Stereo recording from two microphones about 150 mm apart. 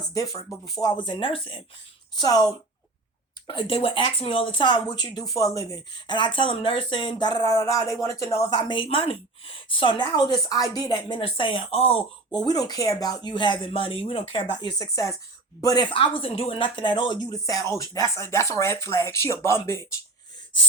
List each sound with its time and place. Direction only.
0.6 s speech: 25° left (ahead or behind)
2.1 s speech: 25° left (ahead or behind)
8.5 s speech: 35° left (ahead or behind)
12.3 s speech: 25° left (ahead or behind)